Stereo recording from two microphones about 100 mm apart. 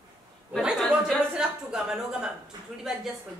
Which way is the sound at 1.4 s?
5° right (ahead or behind).